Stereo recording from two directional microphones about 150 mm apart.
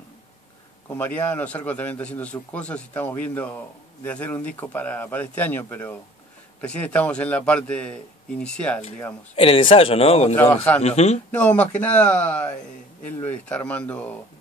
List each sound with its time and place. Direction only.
0.9 s a man's voice: 10° left (ahead or behind)
9.3 s a man's voice: 40° left (ahead or behind)
10.3 s a man's voice: 15° left (ahead or behind)
10.8 s a man's voice: 45° left (ahead or behind)
11.3 s a man's voice: 10° left (ahead or behind)